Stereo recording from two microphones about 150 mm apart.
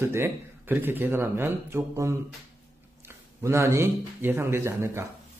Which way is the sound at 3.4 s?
15° right (ahead or behind).